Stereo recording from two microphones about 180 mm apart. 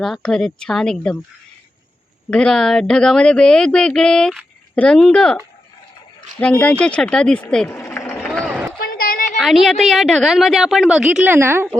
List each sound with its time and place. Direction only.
0.0 s speech: 5° left (ahead or behind)
2.3 s speech: 5° left (ahead or behind)
6.4 s speech: 5° left (ahead or behind)
7.7 s run: 15° left (ahead or behind)
8.8 s a sound: 55° left (ahead or behind)
9.4 s speech: centre (ahead or behind)